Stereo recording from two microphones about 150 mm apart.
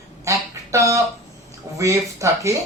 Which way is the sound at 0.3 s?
20° right (ahead or behind).